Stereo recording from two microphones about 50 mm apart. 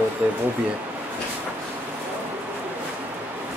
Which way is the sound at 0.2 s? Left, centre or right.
Right.